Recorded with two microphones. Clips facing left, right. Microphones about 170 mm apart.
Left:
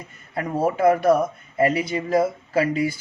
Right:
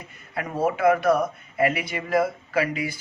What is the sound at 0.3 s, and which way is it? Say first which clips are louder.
Speech: left 3 dB; 35° left (ahead or behind).